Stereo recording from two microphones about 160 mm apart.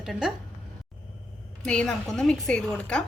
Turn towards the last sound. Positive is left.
turn(degrees=5)  # may be behind; listen again after turning